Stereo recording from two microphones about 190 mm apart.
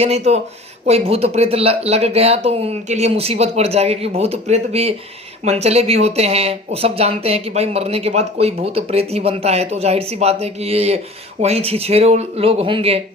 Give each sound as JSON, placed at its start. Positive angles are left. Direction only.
{"t": 0.0, "sound": "speech", "side_deg": -35}